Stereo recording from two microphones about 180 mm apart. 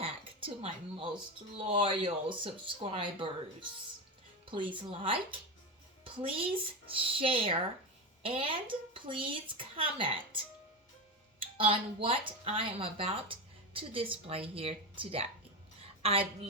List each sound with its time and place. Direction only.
0.0 s speech: 30° right (ahead or behind)
4.7 s speech: 30° right (ahead or behind)
7.0 s speech: 30° right (ahead or behind)